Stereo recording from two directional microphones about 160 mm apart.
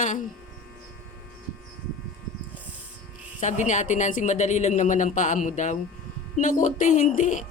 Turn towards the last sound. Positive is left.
turn(degrees=50)  # may be behind; listen again after turning